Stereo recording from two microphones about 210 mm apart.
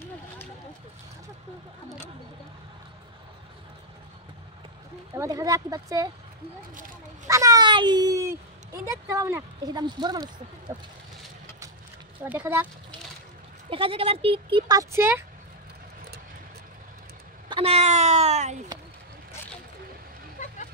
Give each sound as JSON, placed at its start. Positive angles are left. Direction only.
{"t": 5.1, "sound": "a child's voice", "side_deg": -15}
{"t": 7.2, "sound": "a child's voice", "side_deg": -15}
{"t": 12.2, "sound": "a child's voice", "side_deg": -10}
{"t": 13.7, "sound": "speech", "side_deg": -25}
{"t": 17.5, "sound": "speech", "side_deg": -25}
{"t": 20.4, "sound": "vehicle", "side_deg": 35}